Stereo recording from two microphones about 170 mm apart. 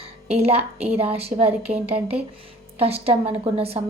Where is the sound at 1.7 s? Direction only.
10° right (ahead or behind).